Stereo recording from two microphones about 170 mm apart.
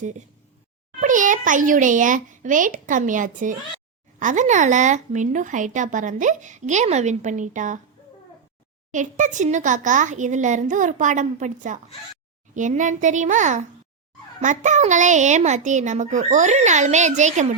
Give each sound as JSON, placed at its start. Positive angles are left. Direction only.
{"t": 1.0, "sound": "speech", "side_deg": -50}
{"t": 8.9, "sound": "speech", "side_deg": -45}